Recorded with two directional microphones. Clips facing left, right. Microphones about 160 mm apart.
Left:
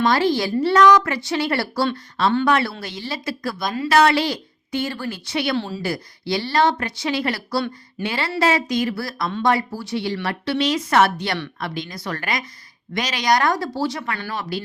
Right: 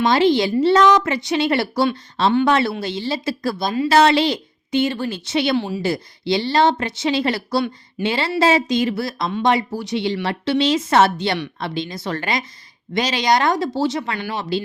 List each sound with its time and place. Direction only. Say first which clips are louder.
0.0 s a woman's voice: right 3 dB; 20° right (ahead or behind)